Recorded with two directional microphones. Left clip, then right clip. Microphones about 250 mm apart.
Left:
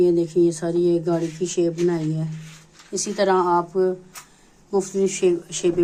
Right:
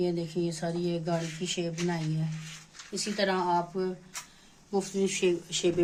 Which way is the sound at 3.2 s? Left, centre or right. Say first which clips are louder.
Left 9 dB; centre.